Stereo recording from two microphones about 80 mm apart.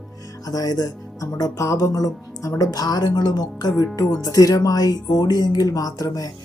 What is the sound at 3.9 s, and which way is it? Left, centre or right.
Speech, left.